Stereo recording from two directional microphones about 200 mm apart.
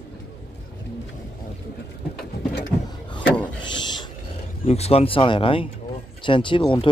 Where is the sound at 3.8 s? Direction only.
20° left (ahead or behind).